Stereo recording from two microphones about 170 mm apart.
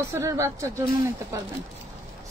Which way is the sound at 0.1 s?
15° right (ahead or behind).